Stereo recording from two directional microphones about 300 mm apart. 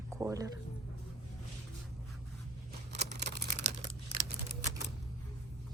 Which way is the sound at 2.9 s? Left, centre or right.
Right.